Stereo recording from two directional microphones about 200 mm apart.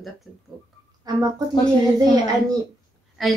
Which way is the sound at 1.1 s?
20° right (ahead or behind).